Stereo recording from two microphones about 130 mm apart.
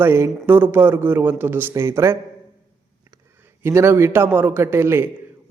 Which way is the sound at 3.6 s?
20° right (ahead or behind).